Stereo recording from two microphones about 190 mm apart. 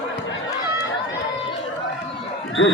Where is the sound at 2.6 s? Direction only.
90° left.